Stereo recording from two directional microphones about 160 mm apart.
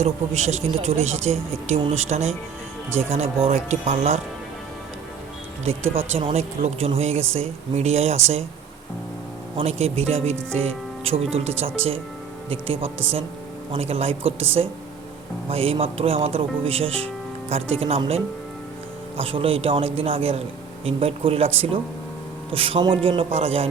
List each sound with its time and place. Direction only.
0.0 s speech: 45° right (ahead or behind)
5.6 s speech: 35° right (ahead or behind)
9.6 s speech: 40° right (ahead or behind)
15.4 s speech: 35° right (ahead or behind)